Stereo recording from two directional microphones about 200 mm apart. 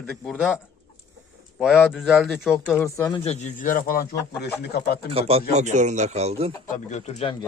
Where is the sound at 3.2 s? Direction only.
40° left (ahead or behind).